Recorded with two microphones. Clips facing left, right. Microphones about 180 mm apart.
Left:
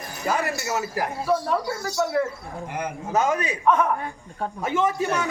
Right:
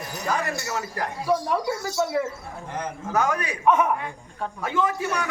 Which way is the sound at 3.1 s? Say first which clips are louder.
Left 2 dB; 20° left (ahead or behind).